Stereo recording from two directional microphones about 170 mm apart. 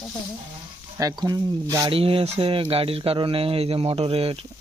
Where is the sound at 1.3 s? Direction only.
20° right (ahead or behind).